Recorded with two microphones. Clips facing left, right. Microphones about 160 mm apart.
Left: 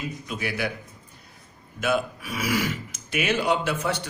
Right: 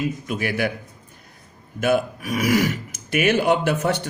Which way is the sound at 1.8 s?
50° right (ahead or behind).